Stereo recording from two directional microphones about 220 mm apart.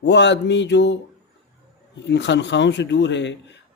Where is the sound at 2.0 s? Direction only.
50° left (ahead or behind).